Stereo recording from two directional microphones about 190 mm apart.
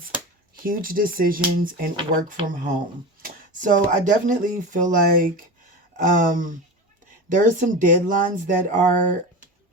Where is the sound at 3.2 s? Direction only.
40° right (ahead or behind).